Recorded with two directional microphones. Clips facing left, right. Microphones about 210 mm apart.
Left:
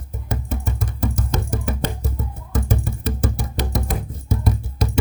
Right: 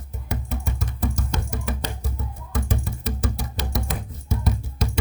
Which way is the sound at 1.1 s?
50° left (ahead or behind).